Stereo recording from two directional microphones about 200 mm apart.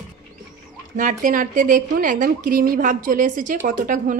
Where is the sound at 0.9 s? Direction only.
40° right (ahead or behind).